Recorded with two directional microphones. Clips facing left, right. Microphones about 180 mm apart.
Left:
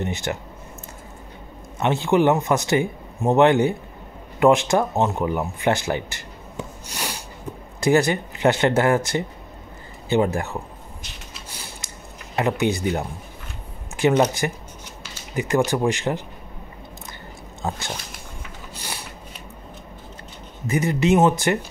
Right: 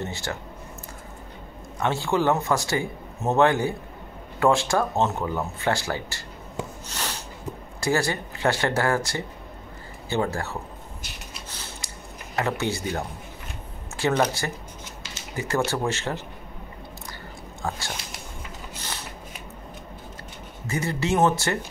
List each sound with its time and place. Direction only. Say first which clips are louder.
0.0 s speech: left 5 dB; 20° left (ahead or behind)
1.8 s speech: left 5 dB; 20° left (ahead or behind)
6.9 s a sound: left 2 dB; 10° left (ahead or behind)
7.8 s speech: left 6 dB; 20° left (ahead or behind)
11.8 s a sound: left 1 dB; 20° left (ahead or behind)
12.4 s speech: left 5 dB; 15° left (ahead or behind)
17.6 s speech: left 3 dB; 20° left (ahead or behind)
18.8 s shuffling cards: left 3 dB; 10° left (ahead or behind)
20.6 s speech: left 7 dB; 20° left (ahead or behind)